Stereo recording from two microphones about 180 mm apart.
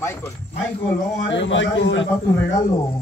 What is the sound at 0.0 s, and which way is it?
Speech, 15° left (ahead or behind).